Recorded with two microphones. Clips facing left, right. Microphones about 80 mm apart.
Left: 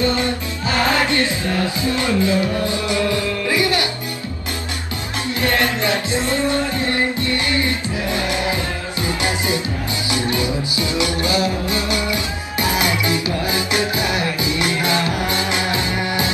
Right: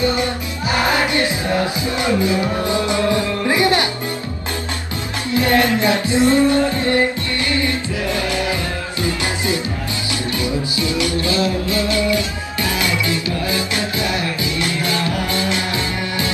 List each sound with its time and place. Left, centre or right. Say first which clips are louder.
0.7 s music: even; centre
5.3 s music: right 4 dB; right
8.1 s music: even; left